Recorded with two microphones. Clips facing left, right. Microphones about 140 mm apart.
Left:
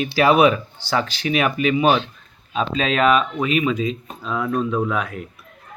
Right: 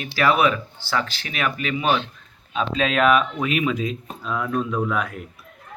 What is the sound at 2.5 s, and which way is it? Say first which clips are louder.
Speech: left 1 dB; centre (ahead or behind).